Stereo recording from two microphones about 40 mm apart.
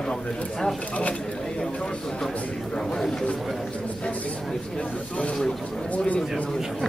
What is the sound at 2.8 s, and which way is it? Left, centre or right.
Speech, centre.